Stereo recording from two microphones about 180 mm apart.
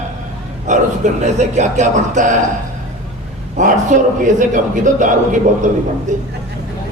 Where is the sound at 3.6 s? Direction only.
45° right (ahead or behind).